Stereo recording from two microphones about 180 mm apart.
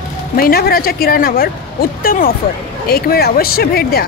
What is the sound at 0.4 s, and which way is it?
A woman's voice, 55° left (ahead or behind).